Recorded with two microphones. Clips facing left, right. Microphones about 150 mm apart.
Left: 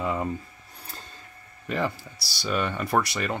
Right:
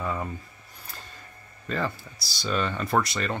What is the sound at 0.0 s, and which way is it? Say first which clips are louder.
Speech: left 3 dB; 15° left (ahead or behind).